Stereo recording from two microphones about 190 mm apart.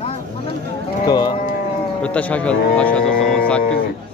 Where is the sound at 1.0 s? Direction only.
20° left (ahead or behind).